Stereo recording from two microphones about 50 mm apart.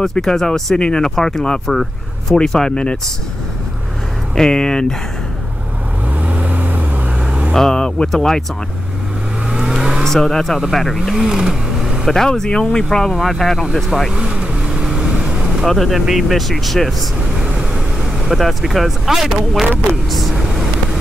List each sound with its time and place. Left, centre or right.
0.0 s speech: centre
4.4 s speech: centre
6.2 s vehicle: right
7.5 s speech: centre
9.5 s vehicle: centre
10.0 s speech: centre
11.0 s speech: centre
12.1 s speech: centre
13.2 s speech: centre
14.1 s vehicle: centre
15.6 s speech: centre
18.3 s speech: centre